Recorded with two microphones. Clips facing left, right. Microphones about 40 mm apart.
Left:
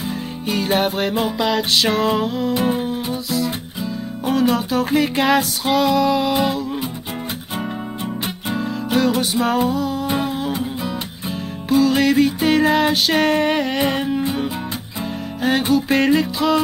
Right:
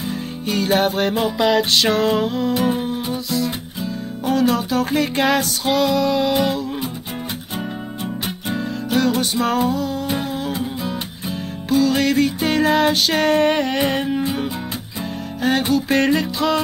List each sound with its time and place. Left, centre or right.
0.5 s music: centre
8.5 s music: centre